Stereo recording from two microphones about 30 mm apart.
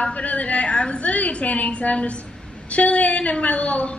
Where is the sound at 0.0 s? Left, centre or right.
Left.